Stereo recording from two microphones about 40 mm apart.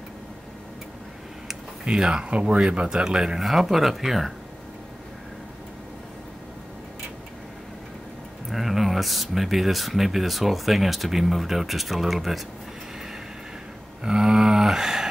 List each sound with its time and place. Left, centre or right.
1.9 s speech: right
3.4 s speech: centre
8.5 s speech: centre
14.0 s a sound: centre